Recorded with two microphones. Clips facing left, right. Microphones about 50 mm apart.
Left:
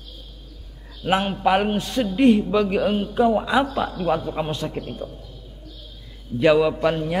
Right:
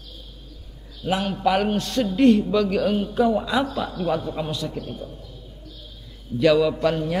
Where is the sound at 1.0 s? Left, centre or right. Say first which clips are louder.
Left 3 dB; left.